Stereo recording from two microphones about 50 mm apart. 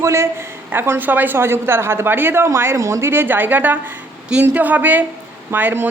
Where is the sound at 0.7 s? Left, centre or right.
Right.